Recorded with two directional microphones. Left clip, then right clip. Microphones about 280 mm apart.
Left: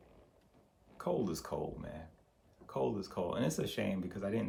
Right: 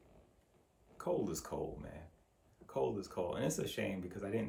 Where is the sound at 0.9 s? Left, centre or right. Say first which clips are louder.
Left 1 dB; centre.